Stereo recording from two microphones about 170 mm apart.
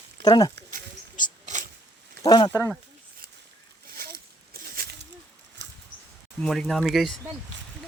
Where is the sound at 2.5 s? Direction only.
15° left (ahead or behind).